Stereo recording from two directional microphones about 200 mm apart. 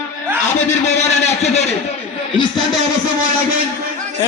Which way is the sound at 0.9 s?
35° left (ahead or behind).